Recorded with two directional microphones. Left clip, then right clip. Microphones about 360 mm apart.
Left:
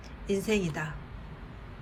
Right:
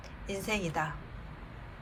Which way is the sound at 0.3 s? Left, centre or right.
Centre.